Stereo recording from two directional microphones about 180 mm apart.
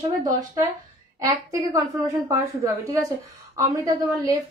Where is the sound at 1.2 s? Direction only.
20° right (ahead or behind).